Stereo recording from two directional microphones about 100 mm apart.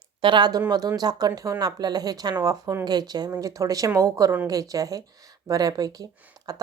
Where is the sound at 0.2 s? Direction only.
50° right (ahead or behind).